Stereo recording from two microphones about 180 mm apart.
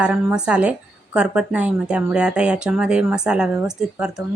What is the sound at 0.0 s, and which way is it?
Speech, 5° right (ahead or behind).